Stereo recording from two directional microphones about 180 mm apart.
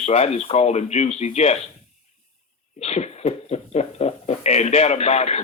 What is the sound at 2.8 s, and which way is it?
Speech, 35° left (ahead or behind).